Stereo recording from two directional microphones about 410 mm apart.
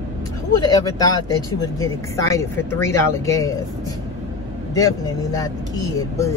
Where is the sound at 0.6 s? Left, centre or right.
Centre.